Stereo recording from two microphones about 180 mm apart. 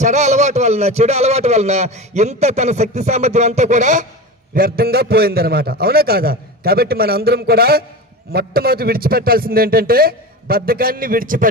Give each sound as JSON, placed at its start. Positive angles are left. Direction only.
{"t": 0.0, "sound": "speech", "side_deg": -40}
{"t": 4.6, "sound": "a man's voice", "side_deg": -55}